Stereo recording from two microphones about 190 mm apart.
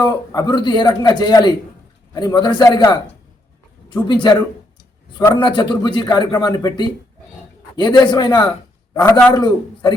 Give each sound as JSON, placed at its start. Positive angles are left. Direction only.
{"t": 0.1, "sound": "a man's voice", "side_deg": 20}
{"t": 7.9, "sound": "a man's voice", "side_deg": 25}